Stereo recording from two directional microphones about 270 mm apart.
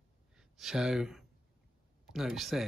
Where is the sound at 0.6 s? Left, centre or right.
Centre.